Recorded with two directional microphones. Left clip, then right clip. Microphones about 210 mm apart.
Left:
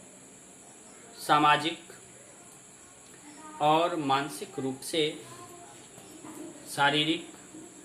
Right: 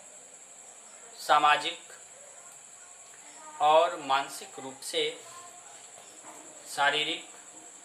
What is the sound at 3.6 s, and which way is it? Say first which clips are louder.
Speech: right 2 dB; centre (ahead or behind).